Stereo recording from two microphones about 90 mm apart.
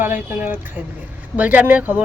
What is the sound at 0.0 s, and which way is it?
Speech, 20° right (ahead or behind).